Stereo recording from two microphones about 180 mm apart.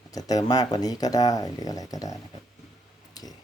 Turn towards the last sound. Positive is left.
turn(degrees=20)  # may be behind; listen again after turning